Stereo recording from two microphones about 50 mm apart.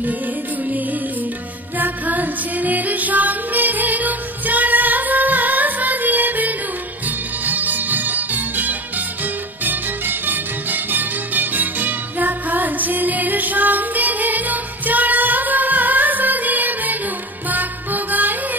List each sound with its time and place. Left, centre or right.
1.8 s music: right